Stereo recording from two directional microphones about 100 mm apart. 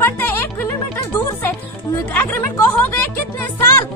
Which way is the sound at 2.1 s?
20° left (ahead or behind).